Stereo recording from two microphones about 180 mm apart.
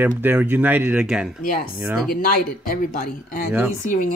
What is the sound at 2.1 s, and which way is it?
Speech, 55° left (ahead or behind).